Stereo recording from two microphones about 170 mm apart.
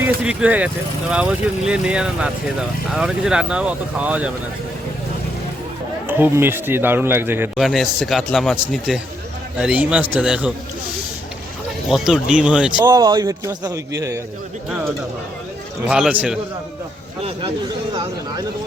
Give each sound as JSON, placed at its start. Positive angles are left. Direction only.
{"t": 0.0, "sound": "a man's voice", "side_deg": -10}
{"t": 6.1, "sound": "a man's voice", "side_deg": -10}
{"t": 7.5, "sound": "a man's voice", "side_deg": 0}
{"t": 11.9, "sound": "speech", "side_deg": 0}
{"t": 12.8, "sound": "a man's voice", "side_deg": -20}
{"t": 15.9, "sound": "speech", "side_deg": -5}